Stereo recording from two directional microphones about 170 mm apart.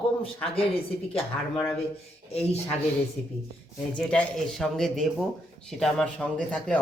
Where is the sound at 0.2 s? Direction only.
35° left (ahead or behind).